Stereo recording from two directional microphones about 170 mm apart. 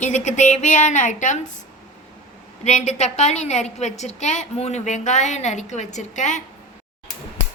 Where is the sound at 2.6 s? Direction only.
40° left (ahead or behind).